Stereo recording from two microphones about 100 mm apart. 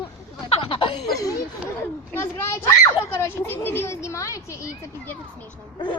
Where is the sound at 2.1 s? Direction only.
25° left (ahead or behind).